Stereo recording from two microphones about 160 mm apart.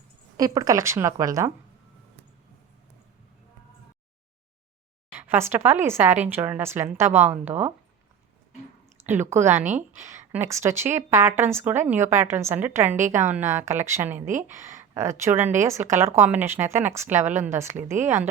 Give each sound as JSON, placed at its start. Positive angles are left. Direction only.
{"t": 0.3, "sound": "a woman's voice", "side_deg": -20}
{"t": 5.3, "sound": "speech", "side_deg": -15}
{"t": 9.0, "sound": "speech", "side_deg": -15}
{"t": 17.9, "sound": "speech", "side_deg": -50}